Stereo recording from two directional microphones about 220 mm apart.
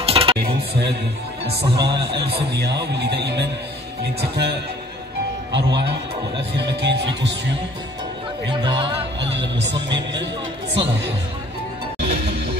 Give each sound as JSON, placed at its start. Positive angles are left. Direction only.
{"t": 0.0, "sound": "cutlery", "side_deg": -25}
{"t": 1.6, "sound": "speech", "side_deg": -25}
{"t": 2.2, "sound": "speech", "side_deg": -50}
{"t": 8.5, "sound": "speech", "side_deg": -20}
{"t": 9.2, "sound": "speech", "side_deg": -55}
{"t": 12.0, "sound": "music", "side_deg": -25}